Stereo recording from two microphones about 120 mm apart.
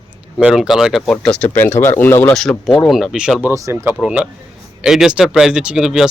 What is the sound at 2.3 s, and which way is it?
Speech, 5° left (ahead or behind).